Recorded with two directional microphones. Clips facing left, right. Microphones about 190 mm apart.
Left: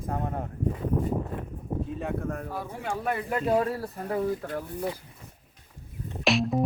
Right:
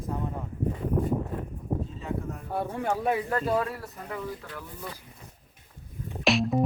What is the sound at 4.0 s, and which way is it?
Speech, 40° left (ahead or behind).